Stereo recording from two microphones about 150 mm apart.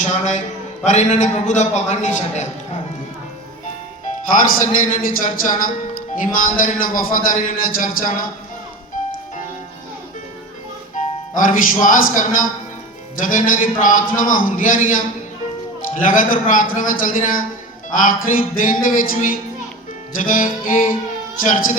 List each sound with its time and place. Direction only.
0.0 s a man's voice: 50° left (ahead or behind)
4.4 s a man's voice: 65° left (ahead or behind)
10.9 s a man's voice: 65° left (ahead or behind)